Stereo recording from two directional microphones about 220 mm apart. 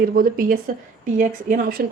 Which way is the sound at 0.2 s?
40° right (ahead or behind).